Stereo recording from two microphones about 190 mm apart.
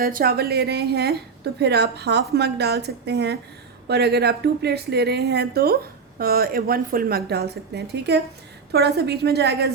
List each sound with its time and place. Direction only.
0.0 s a woman's voice: 50° right (ahead or behind)